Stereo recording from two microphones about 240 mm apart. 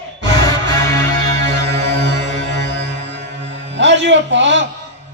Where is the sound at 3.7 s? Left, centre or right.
Right.